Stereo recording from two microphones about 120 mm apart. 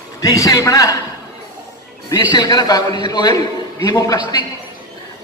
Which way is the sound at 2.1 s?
35° left (ahead or behind).